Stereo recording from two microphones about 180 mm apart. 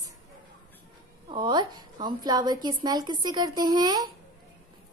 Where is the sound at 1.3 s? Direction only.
25° right (ahead or behind).